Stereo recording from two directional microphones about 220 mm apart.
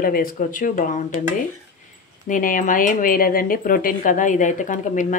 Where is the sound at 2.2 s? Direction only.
35° left (ahead or behind).